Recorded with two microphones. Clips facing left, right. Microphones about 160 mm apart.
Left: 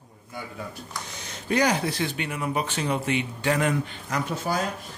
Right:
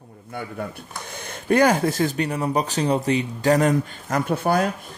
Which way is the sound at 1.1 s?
55° right (ahead or behind).